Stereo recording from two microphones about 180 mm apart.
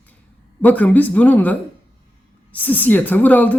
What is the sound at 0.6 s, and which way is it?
Speech, 10° left (ahead or behind).